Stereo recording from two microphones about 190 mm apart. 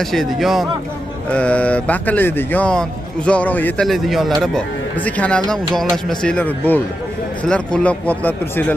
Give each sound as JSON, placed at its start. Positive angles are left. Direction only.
{"t": 0.0, "sound": "a man's voice", "side_deg": 0}